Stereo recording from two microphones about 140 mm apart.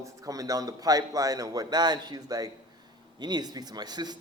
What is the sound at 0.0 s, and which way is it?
Speech, 25° right (ahead or behind).